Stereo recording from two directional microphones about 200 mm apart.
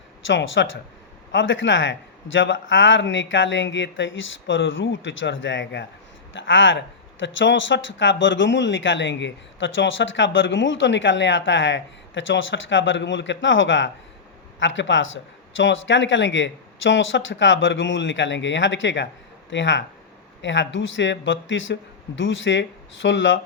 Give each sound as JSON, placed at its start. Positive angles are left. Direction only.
{"t": 0.3, "sound": "speech", "side_deg": 65}